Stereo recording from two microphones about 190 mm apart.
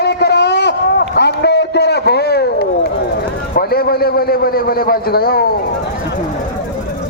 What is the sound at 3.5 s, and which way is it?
A man's voice, 55° left (ahead or behind).